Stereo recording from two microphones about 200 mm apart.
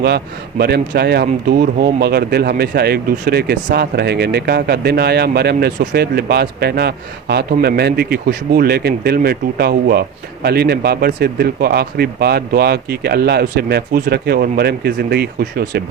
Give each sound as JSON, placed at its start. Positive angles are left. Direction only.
{"t": 0.6, "sound": "speech", "side_deg": -55}